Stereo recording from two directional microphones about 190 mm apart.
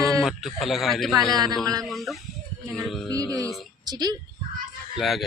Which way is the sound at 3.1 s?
15° right (ahead or behind).